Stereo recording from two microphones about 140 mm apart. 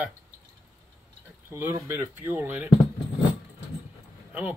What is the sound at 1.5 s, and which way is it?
Speech, 20° right (ahead or behind).